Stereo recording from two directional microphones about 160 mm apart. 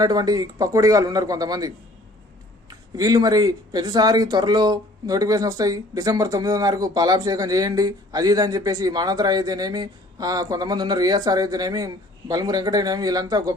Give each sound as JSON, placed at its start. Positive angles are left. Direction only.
{"t": 0.0, "sound": "speech", "side_deg": -25}